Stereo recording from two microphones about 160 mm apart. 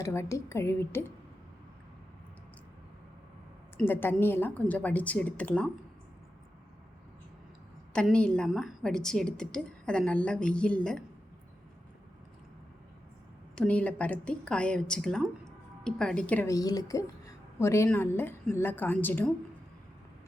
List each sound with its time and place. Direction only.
0.0 s a woman's voice: 20° left (ahead or behind)
3.8 s a woman's voice: 15° left (ahead or behind)
7.9 s a woman's voice: 5° left (ahead or behind)
13.6 s a woman's voice: 10° left (ahead or behind)
16.5 s a woman's voice: 25° left (ahead or behind)